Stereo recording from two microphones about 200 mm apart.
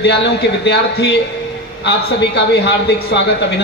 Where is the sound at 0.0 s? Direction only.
55° left (ahead or behind).